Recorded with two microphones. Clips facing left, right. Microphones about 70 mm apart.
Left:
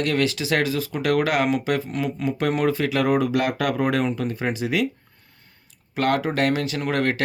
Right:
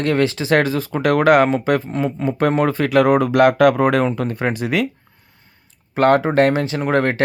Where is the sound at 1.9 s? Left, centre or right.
Right.